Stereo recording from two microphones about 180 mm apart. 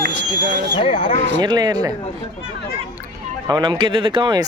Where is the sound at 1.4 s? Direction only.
25° right (ahead or behind).